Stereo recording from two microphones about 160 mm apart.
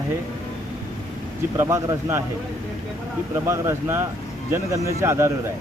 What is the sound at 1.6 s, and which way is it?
Speech, 15° right (ahead or behind).